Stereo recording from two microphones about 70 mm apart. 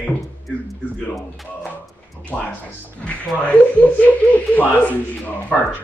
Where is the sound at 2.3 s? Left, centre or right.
Centre.